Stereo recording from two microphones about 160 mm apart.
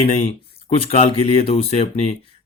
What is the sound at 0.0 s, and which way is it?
Speech, 40° left (ahead or behind).